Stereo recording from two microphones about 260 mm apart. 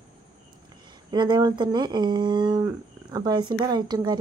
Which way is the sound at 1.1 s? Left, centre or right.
Centre.